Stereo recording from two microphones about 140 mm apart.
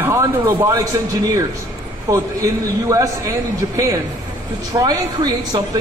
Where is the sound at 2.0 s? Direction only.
25° right (ahead or behind).